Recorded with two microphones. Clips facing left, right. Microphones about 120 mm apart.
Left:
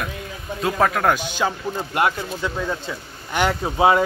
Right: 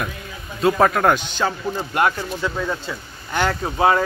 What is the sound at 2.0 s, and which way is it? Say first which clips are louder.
A man's voice: right 1 dB; 20° left (ahead or behind).